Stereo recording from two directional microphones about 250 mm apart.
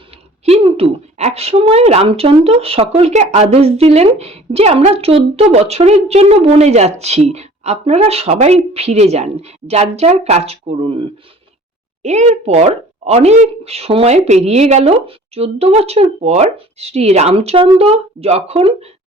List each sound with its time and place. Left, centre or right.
0.4 s a woman's voice: right
12.0 s a woman's voice: right